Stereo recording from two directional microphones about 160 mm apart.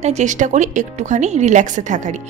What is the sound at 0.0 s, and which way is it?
Speech, 45° right (ahead or behind).